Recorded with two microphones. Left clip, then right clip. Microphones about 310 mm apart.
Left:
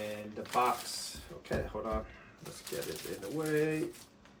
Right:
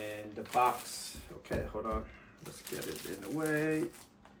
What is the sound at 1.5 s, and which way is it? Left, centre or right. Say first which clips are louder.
Speech: left 1 dB; centre.